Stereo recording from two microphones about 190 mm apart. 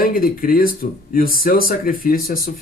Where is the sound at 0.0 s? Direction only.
50° left (ahead or behind).